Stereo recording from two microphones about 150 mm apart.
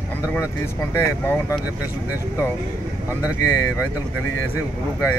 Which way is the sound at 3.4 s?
20° left (ahead or behind).